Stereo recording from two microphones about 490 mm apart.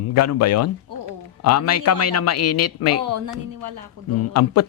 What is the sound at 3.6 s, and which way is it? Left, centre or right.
Speech, right.